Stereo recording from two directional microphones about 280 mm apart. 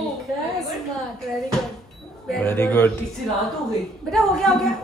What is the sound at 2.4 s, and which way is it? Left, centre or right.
Speech, centre.